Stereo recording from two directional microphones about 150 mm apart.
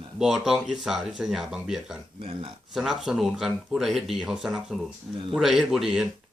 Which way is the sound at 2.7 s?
5° right (ahead or behind).